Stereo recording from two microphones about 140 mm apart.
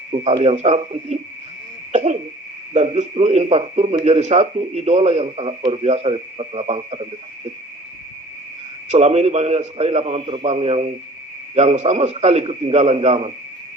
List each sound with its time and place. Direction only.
0.1 s speech: 45° right (ahead or behind)
1.9 s cough: 55° right (ahead or behind)
2.7 s speech: 55° right (ahead or behind)
8.9 s speech: 55° right (ahead or behind)